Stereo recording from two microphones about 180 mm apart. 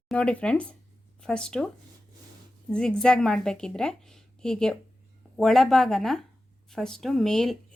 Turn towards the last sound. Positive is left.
turn(degrees=0)  # may be behind; listen again after turning